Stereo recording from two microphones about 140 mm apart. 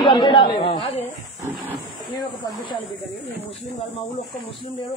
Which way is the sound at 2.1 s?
35° left (ahead or behind).